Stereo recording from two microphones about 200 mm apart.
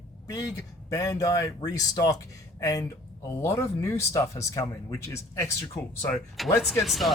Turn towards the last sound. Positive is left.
turn(degrees=0)  # may be behind; listen again after turning